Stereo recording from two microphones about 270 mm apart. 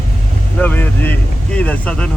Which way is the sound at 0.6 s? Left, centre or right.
Centre.